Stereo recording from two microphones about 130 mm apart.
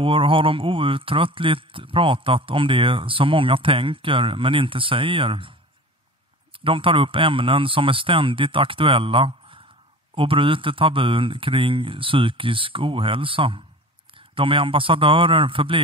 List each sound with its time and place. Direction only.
0.0 s speech: 40° right (ahead or behind)
6.6 s speech: 40° right (ahead or behind)